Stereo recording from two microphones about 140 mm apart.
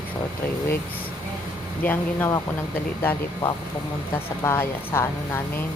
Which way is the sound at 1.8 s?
15° left (ahead or behind).